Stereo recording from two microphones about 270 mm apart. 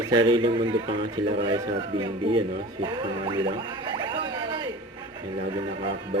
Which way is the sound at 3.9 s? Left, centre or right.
Centre.